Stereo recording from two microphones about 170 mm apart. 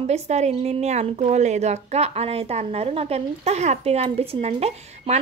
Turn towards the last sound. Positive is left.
turn(degrees=-40)  # may be behind; listen again after turning